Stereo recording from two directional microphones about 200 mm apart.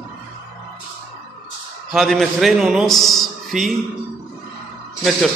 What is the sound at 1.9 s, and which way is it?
A man's voice, centre (ahead or behind).